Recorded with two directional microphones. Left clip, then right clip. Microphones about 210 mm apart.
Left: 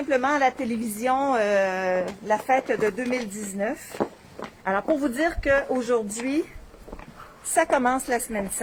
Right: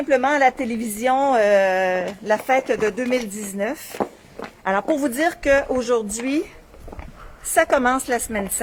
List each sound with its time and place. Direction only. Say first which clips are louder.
0.1 s speech: right 5 dB; 30° right (ahead or behind)
4.6 s a woman's voice: right 3 dB; 50° right (ahead or behind)
7.5 s a woman's voice: right 4 dB; 40° right (ahead or behind)